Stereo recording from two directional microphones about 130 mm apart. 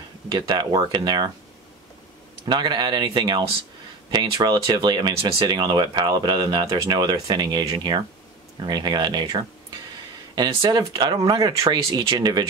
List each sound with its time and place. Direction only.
0.5 s speech: 30° right (ahead or behind)
2.4 s speech: 35° right (ahead or behind)